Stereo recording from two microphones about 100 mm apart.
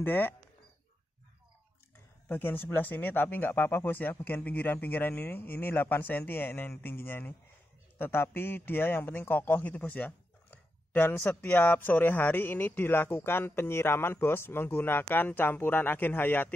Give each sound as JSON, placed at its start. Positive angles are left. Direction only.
{"t": 0.0, "sound": "a man's voice", "side_deg": 20}
{"t": 2.2, "sound": "a man's voice", "side_deg": 20}